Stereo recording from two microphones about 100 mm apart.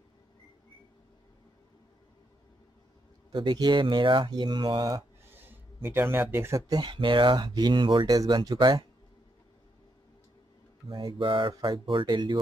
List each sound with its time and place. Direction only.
3.3 s speech: 45° right (ahead or behind)
5.3 s a sound: 20° right (ahead or behind)
6.7 s speech: 50° right (ahead or behind)
8.2 s speech: 40° right (ahead or behind)
10.9 s speech: 50° right (ahead or behind)